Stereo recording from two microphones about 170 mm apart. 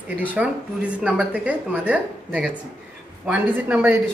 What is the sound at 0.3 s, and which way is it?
A woman's voice, 10° right (ahead or behind).